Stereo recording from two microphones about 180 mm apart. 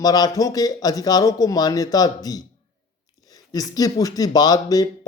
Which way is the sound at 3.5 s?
20° left (ahead or behind).